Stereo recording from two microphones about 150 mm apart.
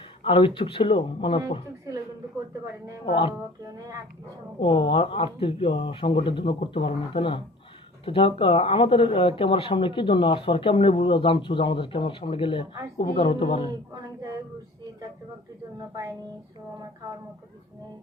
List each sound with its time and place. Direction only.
0.3 s speech: 35° left (ahead or behind)
3.1 s speech: 35° left (ahead or behind)
3.3 s speech: 25° right (ahead or behind)
4.6 s speech: 35° left (ahead or behind)
13.9 s speech: 25° right (ahead or behind)